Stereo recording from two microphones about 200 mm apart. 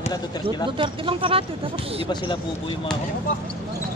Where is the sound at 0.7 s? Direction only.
25° right (ahead or behind).